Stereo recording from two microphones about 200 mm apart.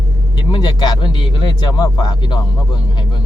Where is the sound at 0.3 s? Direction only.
20° left (ahead or behind).